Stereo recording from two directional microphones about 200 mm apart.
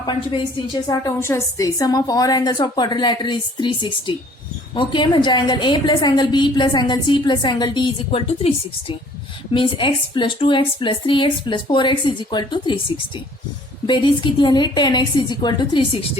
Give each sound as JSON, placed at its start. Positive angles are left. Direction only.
{"t": 0.0, "sound": "a woman's voice", "side_deg": 25}
{"t": 13.8, "sound": "a woman's voice", "side_deg": 25}